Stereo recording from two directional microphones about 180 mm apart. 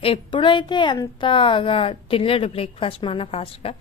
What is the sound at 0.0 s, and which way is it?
A woman's voice, 30° left (ahead or behind).